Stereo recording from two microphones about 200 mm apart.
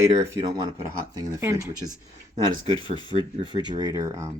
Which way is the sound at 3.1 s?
40° right (ahead or behind).